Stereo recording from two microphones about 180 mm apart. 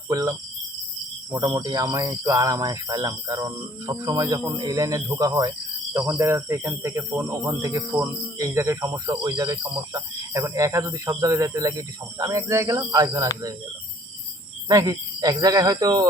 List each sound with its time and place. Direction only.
0.1 s speech: 20° right (ahead or behind)
14.7 s speech: 20° right (ahead or behind)